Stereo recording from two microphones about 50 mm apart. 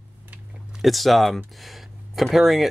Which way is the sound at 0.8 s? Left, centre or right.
Centre.